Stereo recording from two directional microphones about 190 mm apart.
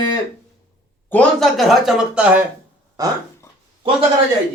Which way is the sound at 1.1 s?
5° left (ahead or behind).